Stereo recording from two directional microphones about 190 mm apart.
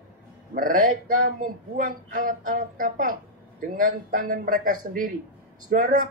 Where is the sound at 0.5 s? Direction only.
45° right (ahead or behind).